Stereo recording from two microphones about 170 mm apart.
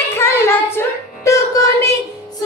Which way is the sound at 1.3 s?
20° left (ahead or behind).